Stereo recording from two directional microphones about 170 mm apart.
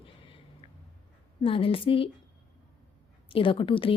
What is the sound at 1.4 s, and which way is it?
Speech, 30° left (ahead or behind).